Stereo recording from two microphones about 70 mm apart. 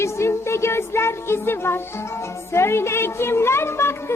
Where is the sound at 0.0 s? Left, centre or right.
Left.